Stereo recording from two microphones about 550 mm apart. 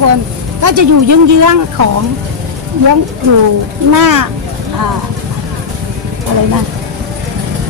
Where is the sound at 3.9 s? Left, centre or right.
Right.